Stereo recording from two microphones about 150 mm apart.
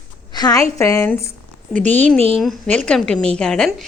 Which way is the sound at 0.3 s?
25° left (ahead or behind).